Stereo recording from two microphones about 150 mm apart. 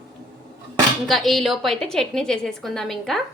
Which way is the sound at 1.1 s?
Centre (ahead or behind).